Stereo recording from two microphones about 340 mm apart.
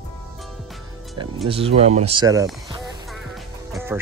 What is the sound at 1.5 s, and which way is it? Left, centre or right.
Speech, centre.